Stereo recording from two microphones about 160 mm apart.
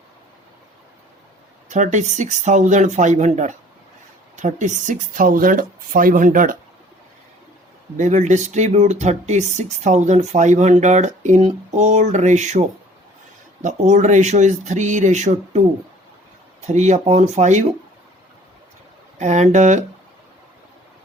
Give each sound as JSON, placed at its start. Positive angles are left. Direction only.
{"t": 1.7, "sound": "speech", "side_deg": -50}
{"t": 7.9, "sound": "speech", "side_deg": -50}
{"t": 16.6, "sound": "speech", "side_deg": -45}
{"t": 19.2, "sound": "speech", "side_deg": -45}